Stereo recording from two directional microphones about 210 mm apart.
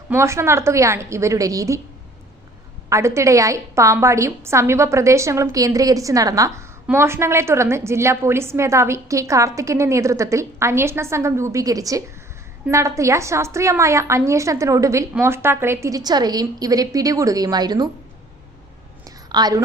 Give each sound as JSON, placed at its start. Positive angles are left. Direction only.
{"t": 0.1, "sound": "a woman's voice", "side_deg": -15}
{"t": 2.9, "sound": "a woman's voice", "side_deg": -15}
{"t": 19.3, "sound": "a woman's voice", "side_deg": -20}